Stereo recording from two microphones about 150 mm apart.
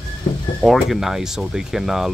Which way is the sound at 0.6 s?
Centre (ahead or behind).